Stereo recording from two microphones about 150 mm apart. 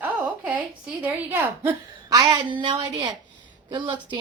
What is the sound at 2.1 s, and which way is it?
A woman's voice, 25° right (ahead or behind).